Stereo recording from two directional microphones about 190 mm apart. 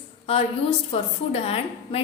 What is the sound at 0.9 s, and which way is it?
A woman's voice, 30° left (ahead or behind).